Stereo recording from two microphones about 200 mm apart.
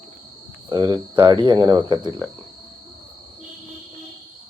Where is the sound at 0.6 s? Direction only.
20° right (ahead or behind).